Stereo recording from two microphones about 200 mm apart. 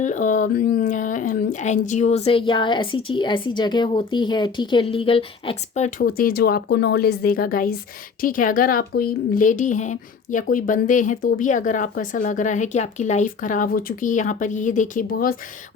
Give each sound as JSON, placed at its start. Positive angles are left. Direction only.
{"t": 0.0, "sound": "speech", "side_deg": 40}